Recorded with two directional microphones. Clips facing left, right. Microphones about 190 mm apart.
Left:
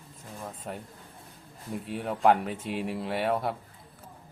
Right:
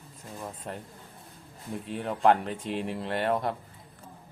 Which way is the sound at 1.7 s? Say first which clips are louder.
Even; 5° left (ahead or behind).